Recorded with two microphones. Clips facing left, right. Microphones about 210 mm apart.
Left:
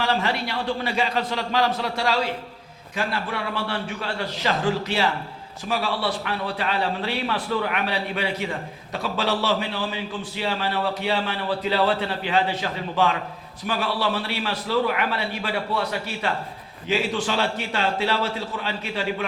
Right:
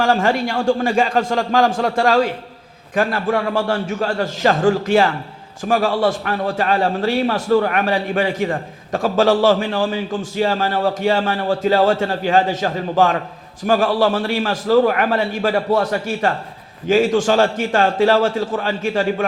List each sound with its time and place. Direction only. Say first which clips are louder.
0.0 s a man's voice: right 7 dB; 50° right (ahead or behind)